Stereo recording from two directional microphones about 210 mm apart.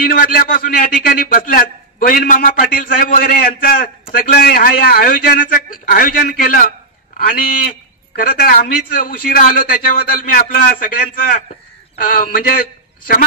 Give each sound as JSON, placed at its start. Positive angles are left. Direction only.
{"t": 0.1, "sound": "a man's voice", "side_deg": 45}